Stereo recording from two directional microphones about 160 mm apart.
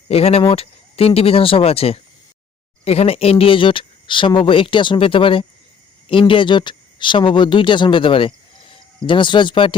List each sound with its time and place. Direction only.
0.1 s speech: 40° left (ahead or behind)